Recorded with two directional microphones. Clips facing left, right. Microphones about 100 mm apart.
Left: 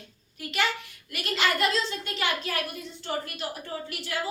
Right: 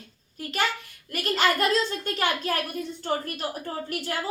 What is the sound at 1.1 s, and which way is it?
A woman's voice, 45° right (ahead or behind).